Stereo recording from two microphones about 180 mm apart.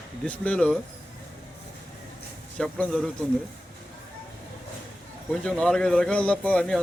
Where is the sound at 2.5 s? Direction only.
5° left (ahead or behind).